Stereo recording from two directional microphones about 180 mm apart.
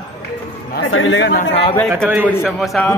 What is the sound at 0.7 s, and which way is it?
Speech, 90° left.